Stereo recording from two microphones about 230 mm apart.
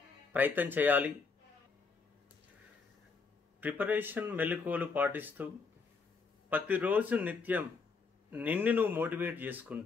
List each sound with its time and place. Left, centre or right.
0.3 s speech: centre
3.6 s speech: centre
6.5 s speech: centre